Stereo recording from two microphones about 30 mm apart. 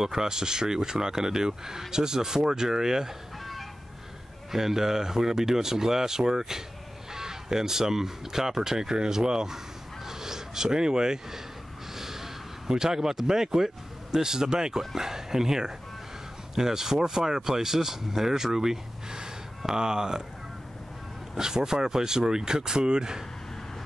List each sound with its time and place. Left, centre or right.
0.0 s speech: centre
4.5 s speech: centre
12.0 s a sound: centre
14.1 s speech: centre
21.4 s speech: right